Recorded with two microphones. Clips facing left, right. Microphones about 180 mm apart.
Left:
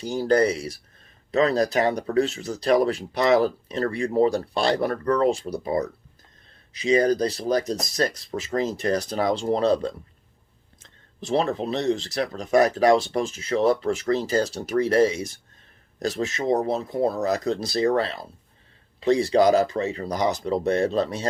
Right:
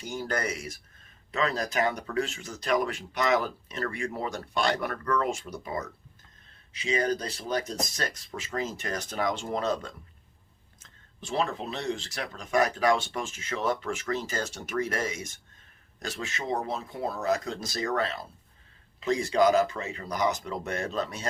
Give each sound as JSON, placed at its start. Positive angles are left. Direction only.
{"t": 0.0, "sound": "speech", "side_deg": 35}